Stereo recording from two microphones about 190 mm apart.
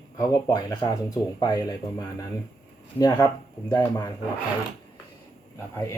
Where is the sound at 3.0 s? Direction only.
15° left (ahead or behind).